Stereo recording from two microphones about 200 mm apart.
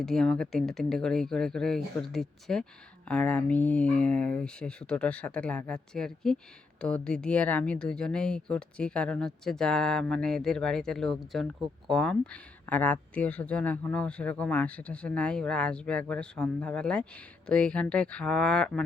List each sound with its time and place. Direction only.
0.0 s speech: centre (ahead or behind)